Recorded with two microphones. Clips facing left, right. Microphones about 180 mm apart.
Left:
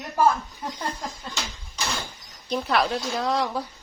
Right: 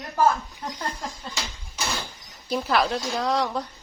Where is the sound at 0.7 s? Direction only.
5° left (ahead or behind).